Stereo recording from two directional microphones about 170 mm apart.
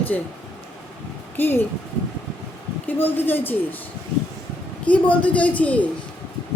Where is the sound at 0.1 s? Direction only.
5° left (ahead or behind).